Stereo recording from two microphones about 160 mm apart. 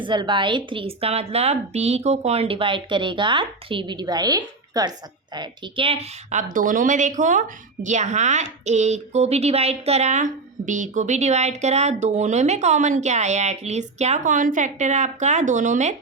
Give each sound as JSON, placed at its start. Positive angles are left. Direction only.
{"t": 0.0, "sound": "a woman's voice", "side_deg": -30}
{"t": 6.5, "sound": "speech", "side_deg": -55}